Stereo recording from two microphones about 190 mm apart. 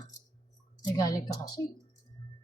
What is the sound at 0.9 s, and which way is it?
Speech, 20° left (ahead or behind).